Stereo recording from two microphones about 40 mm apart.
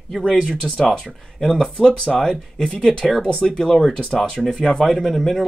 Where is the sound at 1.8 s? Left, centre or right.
Left.